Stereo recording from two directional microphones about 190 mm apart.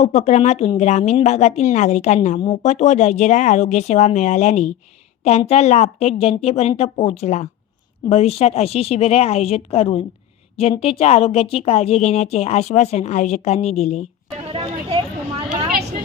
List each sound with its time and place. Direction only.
0.0 s a woman's voice: 35° left (ahead or behind)